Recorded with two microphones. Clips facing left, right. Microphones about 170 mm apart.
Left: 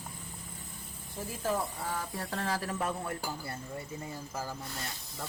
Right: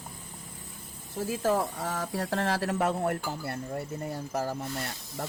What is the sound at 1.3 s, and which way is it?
Speech, 90° right.